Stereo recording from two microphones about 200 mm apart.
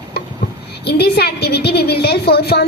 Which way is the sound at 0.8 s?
55° left (ahead or behind).